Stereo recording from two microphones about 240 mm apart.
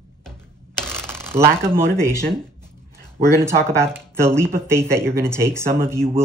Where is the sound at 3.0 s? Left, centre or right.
Centre.